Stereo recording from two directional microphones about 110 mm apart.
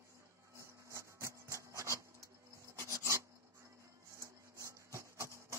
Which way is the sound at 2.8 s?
25° right (ahead or behind).